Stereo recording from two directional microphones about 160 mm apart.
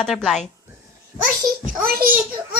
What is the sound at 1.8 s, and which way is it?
Speech, 65° right (ahead or behind).